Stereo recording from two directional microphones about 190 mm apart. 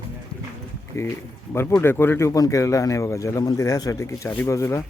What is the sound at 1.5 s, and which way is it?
Speech, 10° left (ahead or behind).